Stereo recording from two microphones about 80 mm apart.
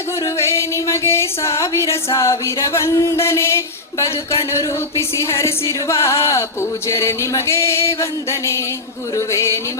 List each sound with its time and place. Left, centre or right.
0.3 s music: left